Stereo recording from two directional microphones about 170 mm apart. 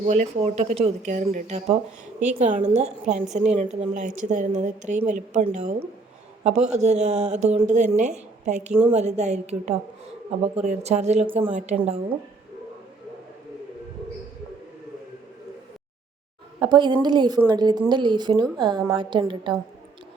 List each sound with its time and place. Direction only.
0.0 s a woman's voice: 40° right (ahead or behind)
16.6 s a woman's voice: 25° right (ahead or behind)